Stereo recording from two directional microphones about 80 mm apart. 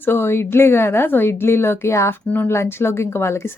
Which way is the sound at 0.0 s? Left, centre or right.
Left.